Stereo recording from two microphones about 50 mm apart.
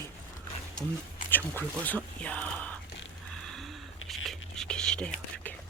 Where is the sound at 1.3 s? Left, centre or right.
Left.